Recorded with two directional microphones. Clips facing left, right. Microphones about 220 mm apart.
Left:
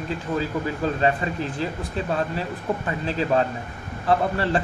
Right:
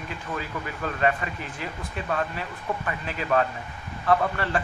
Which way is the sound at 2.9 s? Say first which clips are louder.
Left 3 dB; 30° left (ahead or behind).